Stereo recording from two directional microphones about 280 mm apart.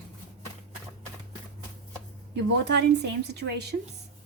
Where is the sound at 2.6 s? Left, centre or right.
Right.